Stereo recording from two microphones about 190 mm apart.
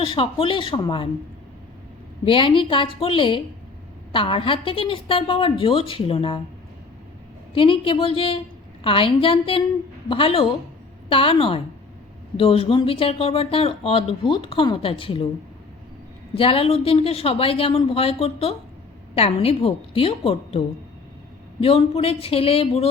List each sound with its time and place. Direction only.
0.0 s speech: 25° left (ahead or behind)
2.2 s speech: 25° left (ahead or behind)
7.5 s speech: 30° left (ahead or behind)
16.3 s a woman's voice: 30° left (ahead or behind)
21.6 s a woman's voice: 30° left (ahead or behind)